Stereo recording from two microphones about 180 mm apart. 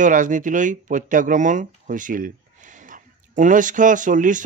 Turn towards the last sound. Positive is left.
turn(degrees=-45)  # may be behind; listen again after turning